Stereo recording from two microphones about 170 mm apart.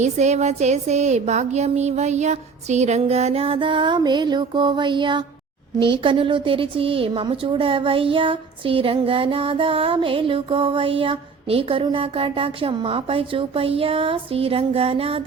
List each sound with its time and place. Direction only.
0.0 s speech: 40° right (ahead or behind)